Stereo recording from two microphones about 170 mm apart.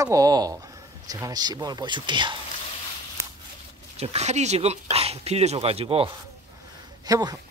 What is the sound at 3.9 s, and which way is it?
Speech, 40° right (ahead or behind).